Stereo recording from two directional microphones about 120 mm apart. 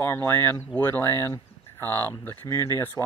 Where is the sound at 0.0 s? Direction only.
15° left (ahead or behind).